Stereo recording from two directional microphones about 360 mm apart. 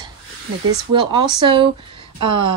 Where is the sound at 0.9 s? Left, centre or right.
Centre.